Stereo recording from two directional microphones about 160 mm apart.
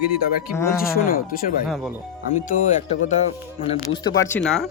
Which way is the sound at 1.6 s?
5° right (ahead or behind).